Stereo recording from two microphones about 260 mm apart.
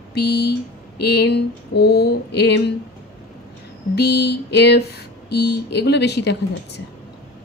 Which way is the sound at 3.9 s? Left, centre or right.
Left.